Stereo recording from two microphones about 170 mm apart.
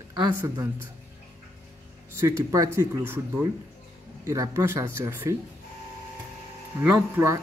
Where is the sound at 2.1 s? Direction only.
15° right (ahead or behind).